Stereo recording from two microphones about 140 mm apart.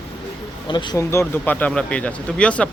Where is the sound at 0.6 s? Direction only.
35° left (ahead or behind).